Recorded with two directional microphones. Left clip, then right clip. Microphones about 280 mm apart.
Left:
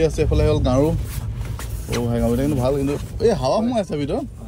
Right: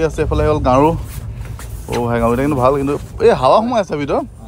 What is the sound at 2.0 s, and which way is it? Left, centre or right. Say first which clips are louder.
Speech: right 6 dB; right.